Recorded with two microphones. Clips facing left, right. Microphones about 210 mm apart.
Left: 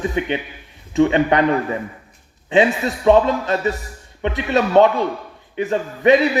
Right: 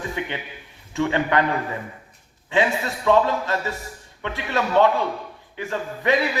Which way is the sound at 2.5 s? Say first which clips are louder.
Left 6 dB; 20° left (ahead or behind).